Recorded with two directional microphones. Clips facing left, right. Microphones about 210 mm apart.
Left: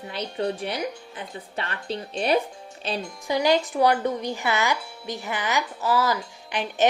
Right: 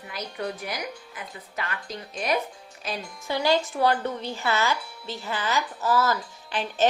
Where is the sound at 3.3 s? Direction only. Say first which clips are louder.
Left 2 dB; 15° left (ahead or behind).